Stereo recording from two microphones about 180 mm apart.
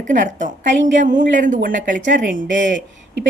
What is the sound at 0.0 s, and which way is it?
A woman's voice, 45° right (ahead or behind).